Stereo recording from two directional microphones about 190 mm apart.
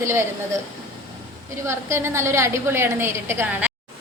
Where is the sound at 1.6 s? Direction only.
15° right (ahead or behind).